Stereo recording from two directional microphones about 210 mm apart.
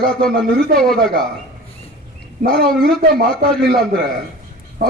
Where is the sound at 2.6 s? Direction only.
45° right (ahead or behind).